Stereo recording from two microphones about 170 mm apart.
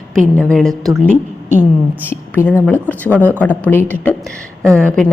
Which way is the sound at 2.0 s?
10° left (ahead or behind).